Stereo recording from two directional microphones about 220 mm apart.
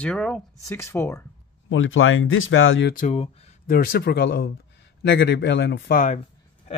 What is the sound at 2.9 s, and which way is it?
Speech, 30° left (ahead or behind).